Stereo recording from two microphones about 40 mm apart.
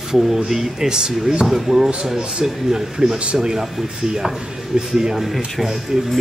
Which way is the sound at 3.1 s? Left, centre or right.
Right.